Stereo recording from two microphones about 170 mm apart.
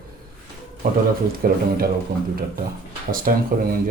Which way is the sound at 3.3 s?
55° right (ahead or behind).